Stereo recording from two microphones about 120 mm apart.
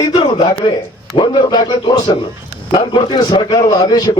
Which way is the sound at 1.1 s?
40° left (ahead or behind).